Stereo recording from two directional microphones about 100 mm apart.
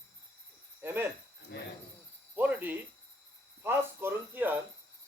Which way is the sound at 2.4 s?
15° right (ahead or behind).